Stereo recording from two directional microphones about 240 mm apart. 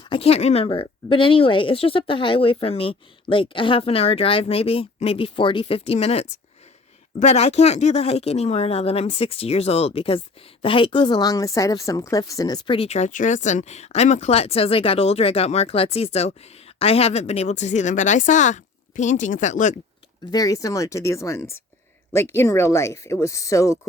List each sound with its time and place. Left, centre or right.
0.0 s speech: left
20.3 s speech: centre